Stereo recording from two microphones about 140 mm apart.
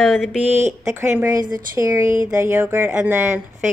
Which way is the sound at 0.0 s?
Centre (ahead or behind).